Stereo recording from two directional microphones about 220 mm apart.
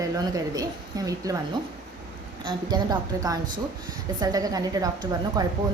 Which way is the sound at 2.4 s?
20° right (ahead or behind).